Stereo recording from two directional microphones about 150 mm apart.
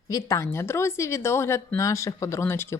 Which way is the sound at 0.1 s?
20° left (ahead or behind).